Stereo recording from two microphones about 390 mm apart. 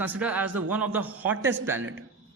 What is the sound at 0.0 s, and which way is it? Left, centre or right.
A man's voice, centre.